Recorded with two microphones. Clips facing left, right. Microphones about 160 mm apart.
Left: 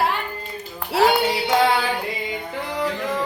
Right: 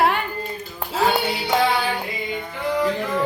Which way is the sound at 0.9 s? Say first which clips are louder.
Left 3 dB; 75° left (ahead or behind).